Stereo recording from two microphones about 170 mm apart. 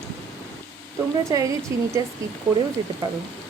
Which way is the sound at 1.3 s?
20° right (ahead or behind).